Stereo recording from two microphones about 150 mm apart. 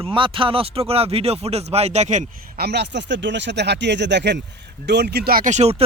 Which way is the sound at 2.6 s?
90° right.